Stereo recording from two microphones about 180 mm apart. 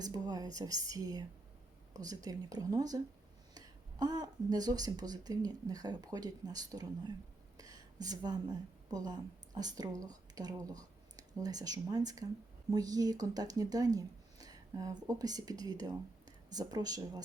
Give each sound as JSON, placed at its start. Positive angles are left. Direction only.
{"t": 0.0, "sound": "speech", "side_deg": -20}
{"t": 7.5, "sound": "a sound", "side_deg": -20}
{"t": 9.6, "sound": "speech", "side_deg": -20}